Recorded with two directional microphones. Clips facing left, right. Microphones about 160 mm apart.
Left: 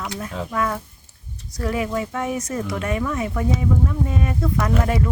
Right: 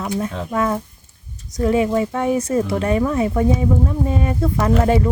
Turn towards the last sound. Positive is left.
turn(degrees=-30)  # may be behind; listen again after turning